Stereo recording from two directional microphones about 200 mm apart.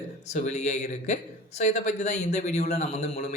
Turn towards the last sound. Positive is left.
turn(degrees=35)  # may be behind; listen again after turning